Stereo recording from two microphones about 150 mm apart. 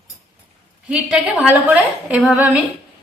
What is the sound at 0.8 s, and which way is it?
A woman's voice, 10° right (ahead or behind).